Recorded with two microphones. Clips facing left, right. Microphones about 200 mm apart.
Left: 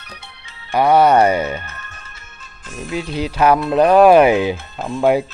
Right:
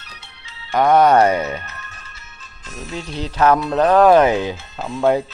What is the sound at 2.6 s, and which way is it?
Speech, 50° left (ahead or behind).